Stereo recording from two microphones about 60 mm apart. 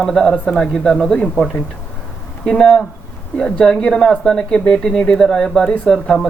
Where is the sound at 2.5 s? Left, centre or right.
Centre.